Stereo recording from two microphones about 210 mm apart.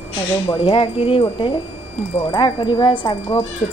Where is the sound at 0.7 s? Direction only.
25° left (ahead or behind).